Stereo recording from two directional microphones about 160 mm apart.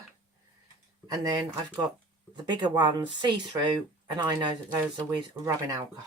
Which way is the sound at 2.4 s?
25° right (ahead or behind).